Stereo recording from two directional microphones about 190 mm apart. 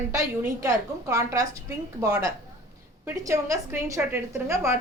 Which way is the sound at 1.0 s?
15° right (ahead or behind).